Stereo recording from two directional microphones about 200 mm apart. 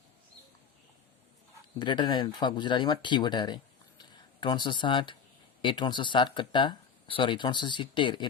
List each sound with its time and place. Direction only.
1.8 s speech: 20° left (ahead or behind)